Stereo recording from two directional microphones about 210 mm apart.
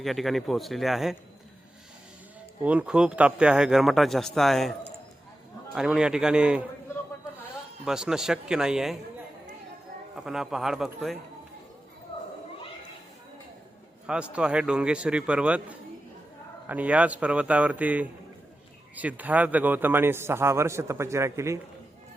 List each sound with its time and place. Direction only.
0.0 s speech: centre (ahead or behind)
2.6 s speech: 5° right (ahead or behind)
5.7 s speech: 5° right (ahead or behind)
7.9 s speech: 5° right (ahead or behind)
10.2 s speech: centre (ahead or behind)
14.1 s a man's voice: 5° right (ahead or behind)